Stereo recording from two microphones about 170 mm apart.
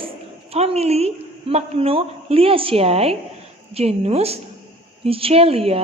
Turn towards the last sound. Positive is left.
turn(degrees=-35)  # may be behind; listen again after turning